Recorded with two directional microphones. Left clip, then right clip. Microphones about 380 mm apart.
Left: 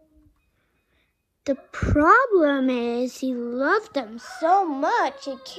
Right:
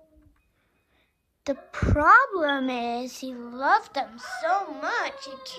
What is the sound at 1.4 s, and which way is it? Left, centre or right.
A woman's voice, centre.